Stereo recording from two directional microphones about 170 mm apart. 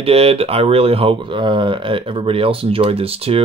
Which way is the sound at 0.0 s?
35° right (ahead or behind).